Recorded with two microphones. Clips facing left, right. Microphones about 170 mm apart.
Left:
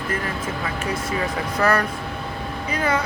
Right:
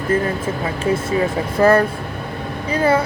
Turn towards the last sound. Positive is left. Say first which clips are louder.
# right 6 dB
turn(degrees=-30)  # may be behind; listen again after turning